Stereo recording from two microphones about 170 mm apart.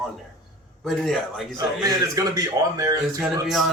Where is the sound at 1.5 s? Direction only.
20° right (ahead or behind).